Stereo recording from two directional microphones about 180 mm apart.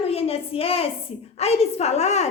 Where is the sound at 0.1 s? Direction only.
35° left (ahead or behind).